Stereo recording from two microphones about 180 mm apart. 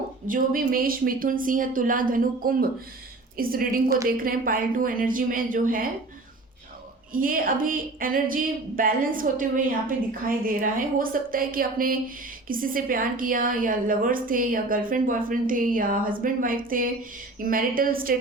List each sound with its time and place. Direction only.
0.3 s a woman's voice: 50° right (ahead or behind)
7.1 s a woman's voice: 50° right (ahead or behind)